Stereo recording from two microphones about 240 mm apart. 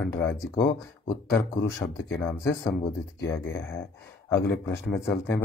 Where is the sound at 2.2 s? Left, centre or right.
Centre.